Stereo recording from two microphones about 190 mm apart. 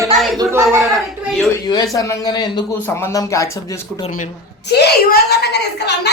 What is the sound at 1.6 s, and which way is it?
Speech, 20° left (ahead or behind).